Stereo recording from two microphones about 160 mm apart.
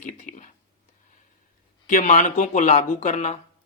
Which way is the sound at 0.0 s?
55° left (ahead or behind).